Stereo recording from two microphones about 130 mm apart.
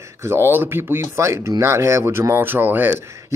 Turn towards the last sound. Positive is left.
turn(degrees=-20)  # may be behind; listen again after turning